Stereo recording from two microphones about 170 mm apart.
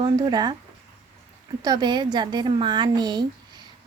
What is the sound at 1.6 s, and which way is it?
Speech, 25° right (ahead or behind).